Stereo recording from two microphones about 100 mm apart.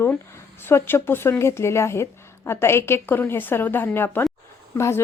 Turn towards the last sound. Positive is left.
turn(degrees=25)  # may be behind; listen again after turning